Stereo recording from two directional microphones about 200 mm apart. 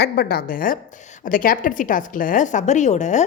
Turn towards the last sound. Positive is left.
turn(degrees=35)  # may be behind; listen again after turning